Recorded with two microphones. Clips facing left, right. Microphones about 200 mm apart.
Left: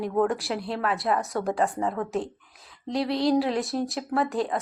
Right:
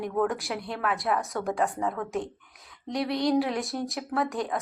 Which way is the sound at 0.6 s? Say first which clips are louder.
Left 2 dB; 30° left (ahead or behind).